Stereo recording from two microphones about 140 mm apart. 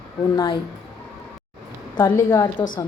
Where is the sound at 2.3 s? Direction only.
15° left (ahead or behind).